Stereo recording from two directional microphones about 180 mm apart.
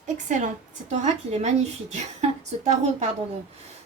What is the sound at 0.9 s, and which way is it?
A woman's voice, 40° right (ahead or behind).